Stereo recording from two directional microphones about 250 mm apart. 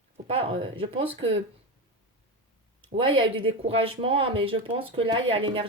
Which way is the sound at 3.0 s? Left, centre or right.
Right.